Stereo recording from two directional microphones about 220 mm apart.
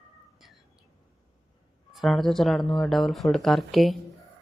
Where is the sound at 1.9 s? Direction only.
Centre (ahead or behind).